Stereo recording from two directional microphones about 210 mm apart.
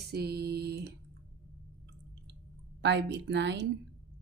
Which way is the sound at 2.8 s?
55° right (ahead or behind).